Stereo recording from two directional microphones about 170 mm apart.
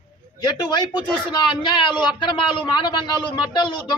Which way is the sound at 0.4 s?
25° left (ahead or behind).